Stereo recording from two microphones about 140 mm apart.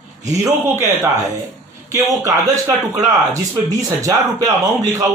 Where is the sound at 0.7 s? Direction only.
15° right (ahead or behind).